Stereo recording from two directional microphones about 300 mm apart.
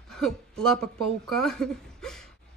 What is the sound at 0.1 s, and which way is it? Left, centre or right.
Speech, centre.